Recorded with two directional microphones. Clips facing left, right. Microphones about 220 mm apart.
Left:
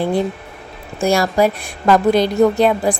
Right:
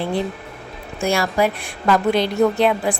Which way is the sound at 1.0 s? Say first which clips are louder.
Left 4 dB; 40° left (ahead or behind).